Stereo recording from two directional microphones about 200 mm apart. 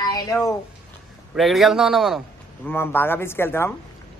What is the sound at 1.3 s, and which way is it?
Speech, centre (ahead or behind).